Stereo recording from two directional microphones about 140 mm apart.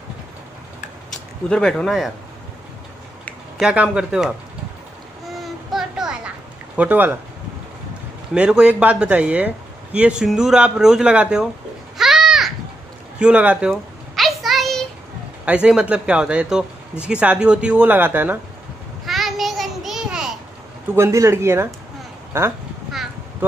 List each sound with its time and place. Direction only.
1.5 s a man's voice: 5° left (ahead or behind)
3.6 s speech: 10° right (ahead or behind)
5.3 s child singing: centre (ahead or behind)
6.8 s speech: 10° right (ahead or behind)
8.4 s a man's voice: 5° right (ahead or behind)
12.0 s a sound: centre (ahead or behind)
15.4 s speech: 10° right (ahead or behind)
19.0 s a sound: centre (ahead or behind)
20.9 s a man's voice: 20° right (ahead or behind)